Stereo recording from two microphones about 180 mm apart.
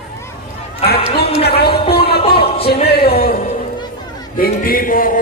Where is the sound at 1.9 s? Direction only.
60° left (ahead or behind).